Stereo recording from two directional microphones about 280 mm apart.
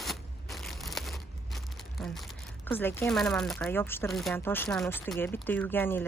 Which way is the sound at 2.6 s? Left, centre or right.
Centre.